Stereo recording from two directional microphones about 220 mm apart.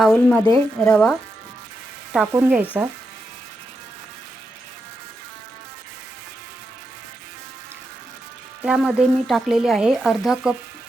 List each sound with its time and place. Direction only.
0.0 s speech: 5° left (ahead or behind)
2.1 s speech: 5° right (ahead or behind)
8.6 s speech: 5° right (ahead or behind)